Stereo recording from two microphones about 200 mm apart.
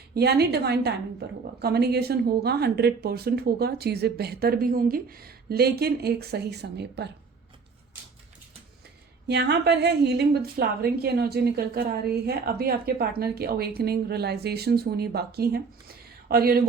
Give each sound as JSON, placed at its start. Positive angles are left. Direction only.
{"t": 0.1, "sound": "a woman's voice", "side_deg": -55}
{"t": 9.2, "sound": "a woman's voice", "side_deg": -55}